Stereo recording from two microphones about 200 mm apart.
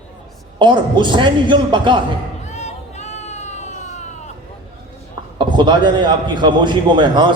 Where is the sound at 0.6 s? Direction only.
25° right (ahead or behind).